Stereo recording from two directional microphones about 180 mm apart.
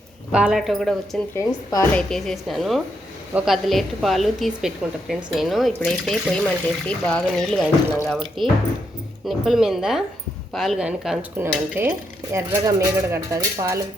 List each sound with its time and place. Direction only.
0.3 s a woman's voice: 5° right (ahead or behind)
1.4 s a woman's voice: 15° left (ahead or behind)
2.0 s a woman's voice: 5° left (ahead or behind); by 13.8 s 20° right (ahead or behind)